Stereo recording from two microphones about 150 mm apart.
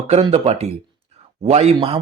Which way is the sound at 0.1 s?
40° right (ahead or behind).